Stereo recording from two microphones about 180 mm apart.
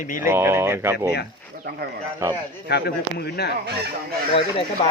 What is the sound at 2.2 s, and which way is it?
Speech, 20° right (ahead or behind).